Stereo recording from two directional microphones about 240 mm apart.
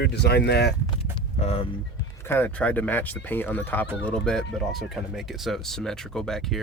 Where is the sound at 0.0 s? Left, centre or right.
Left.